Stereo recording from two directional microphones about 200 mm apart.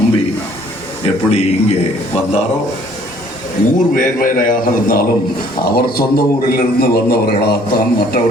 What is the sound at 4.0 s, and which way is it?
A man's voice, 45° left (ahead or behind).